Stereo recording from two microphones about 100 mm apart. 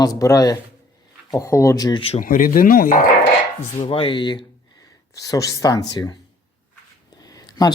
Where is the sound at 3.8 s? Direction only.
60° left (ahead or behind).